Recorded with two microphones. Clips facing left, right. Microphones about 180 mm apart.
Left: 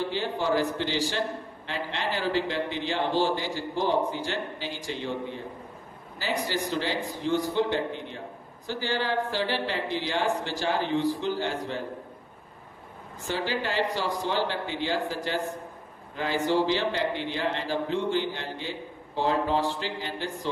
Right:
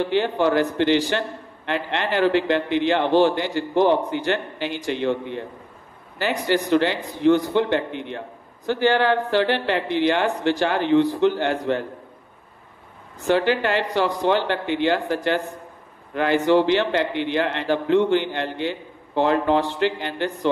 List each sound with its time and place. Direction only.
0.0 s a man's voice: 65° right (ahead or behind)
13.3 s a man's voice: 65° right (ahead or behind)